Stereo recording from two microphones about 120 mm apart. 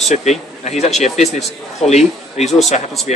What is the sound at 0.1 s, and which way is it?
Speech, 70° left (ahead or behind).